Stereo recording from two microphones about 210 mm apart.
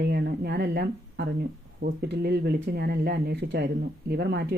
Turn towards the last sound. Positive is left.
turn(degrees=-50)  # may be behind; listen again after turning